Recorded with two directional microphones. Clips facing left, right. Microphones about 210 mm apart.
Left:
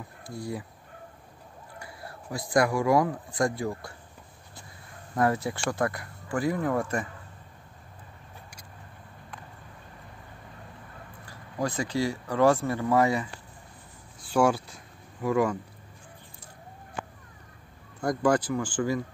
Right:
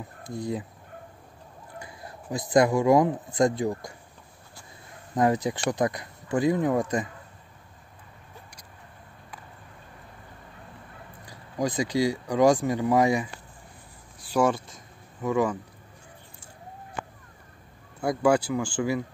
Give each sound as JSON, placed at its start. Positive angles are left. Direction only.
{"t": 0.2, "sound": "speech", "side_deg": -20}
{"t": 1.8, "sound": "speech", "side_deg": -20}
{"t": 5.1, "sound": "speech", "side_deg": -20}
{"t": 11.2, "sound": "speech", "side_deg": -15}
{"t": 14.3, "sound": "speech", "side_deg": 0}
{"t": 18.0, "sound": "speech", "side_deg": -10}